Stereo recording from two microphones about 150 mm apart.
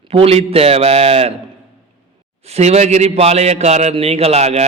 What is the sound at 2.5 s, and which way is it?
A man's voice, 45° right (ahead or behind).